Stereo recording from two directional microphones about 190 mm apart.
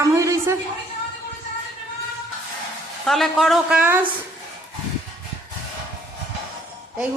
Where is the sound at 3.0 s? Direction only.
Centre (ahead or behind).